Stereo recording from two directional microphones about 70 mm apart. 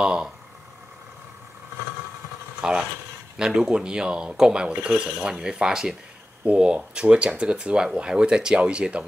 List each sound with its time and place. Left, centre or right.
0.0 s speech: centre
2.6 s speech: centre